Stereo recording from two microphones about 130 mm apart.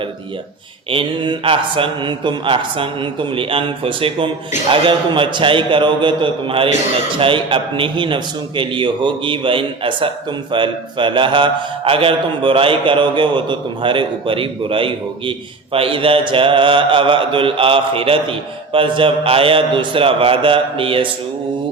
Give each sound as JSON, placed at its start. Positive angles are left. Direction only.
{"t": 0.9, "sound": "a man's voice", "side_deg": -40}